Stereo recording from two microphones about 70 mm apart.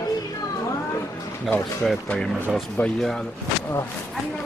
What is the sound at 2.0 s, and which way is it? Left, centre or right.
Speech, centre.